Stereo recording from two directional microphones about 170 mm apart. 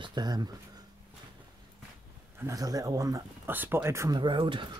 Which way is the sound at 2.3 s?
20° right (ahead or behind).